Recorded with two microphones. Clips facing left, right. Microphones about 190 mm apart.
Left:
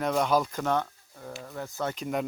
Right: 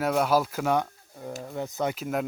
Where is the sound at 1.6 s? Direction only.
20° right (ahead or behind).